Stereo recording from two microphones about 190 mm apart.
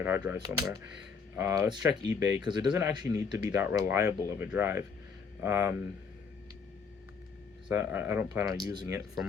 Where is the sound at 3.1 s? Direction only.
15° right (ahead or behind).